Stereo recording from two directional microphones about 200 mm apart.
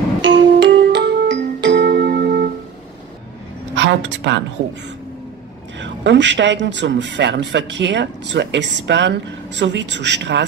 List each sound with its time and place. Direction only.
0.2 s music: 65° right (ahead or behind)
3.7 s a woman's voice: 65° right (ahead or behind)
5.8 s a man's voice: 65° right (ahead or behind)